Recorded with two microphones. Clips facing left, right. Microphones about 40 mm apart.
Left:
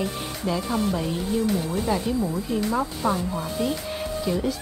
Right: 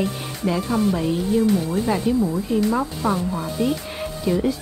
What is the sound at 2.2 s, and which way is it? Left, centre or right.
Speech, centre.